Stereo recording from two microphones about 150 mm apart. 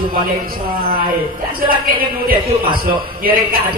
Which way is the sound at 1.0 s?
75° right (ahead or behind).